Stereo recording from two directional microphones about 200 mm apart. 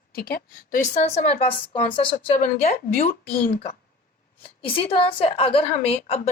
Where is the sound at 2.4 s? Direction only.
40° left (ahead or behind).